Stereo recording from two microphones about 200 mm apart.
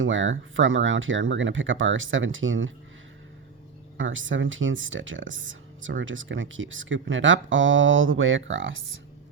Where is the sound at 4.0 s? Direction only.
75° right (ahead or behind).